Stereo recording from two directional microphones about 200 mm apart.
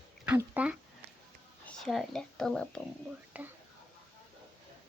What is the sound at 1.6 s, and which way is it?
Speech, centre (ahead or behind).